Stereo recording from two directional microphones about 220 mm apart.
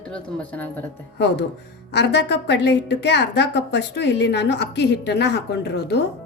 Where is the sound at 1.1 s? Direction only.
50° left (ahead or behind).